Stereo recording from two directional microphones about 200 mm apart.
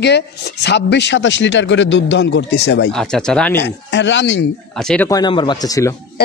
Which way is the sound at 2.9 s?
5° left (ahead or behind).